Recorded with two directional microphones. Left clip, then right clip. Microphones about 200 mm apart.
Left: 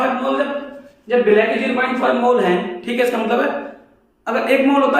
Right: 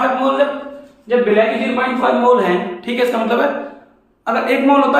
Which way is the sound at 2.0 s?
5° right (ahead or behind).